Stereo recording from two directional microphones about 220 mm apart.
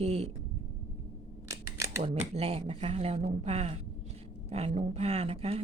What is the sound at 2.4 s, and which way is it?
A woman's voice, 25° right (ahead or behind).